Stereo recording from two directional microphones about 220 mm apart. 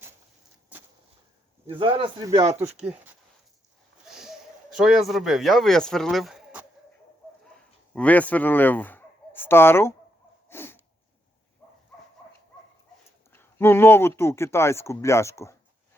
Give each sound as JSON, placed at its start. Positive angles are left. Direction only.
{"t": 1.7, "sound": "speech", "side_deg": -25}
{"t": 2.8, "sound": "speech", "side_deg": -5}
{"t": 7.9, "sound": "speech", "side_deg": 5}
{"t": 10.5, "sound": "a sound", "side_deg": 10}
{"t": 13.3, "sound": "speech", "side_deg": 10}